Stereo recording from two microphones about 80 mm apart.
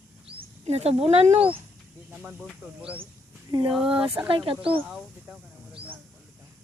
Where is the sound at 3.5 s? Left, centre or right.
Right.